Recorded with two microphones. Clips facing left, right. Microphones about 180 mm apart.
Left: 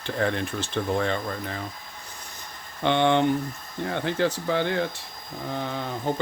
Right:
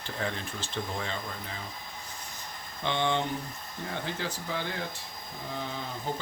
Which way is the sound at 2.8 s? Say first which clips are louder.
Left 8 dB; 65° left (ahead or behind).